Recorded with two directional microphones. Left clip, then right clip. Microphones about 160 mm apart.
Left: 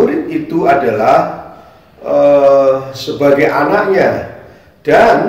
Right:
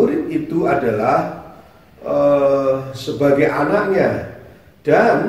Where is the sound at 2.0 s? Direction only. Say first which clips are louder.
Left 6 dB; 10° right (ahead or behind).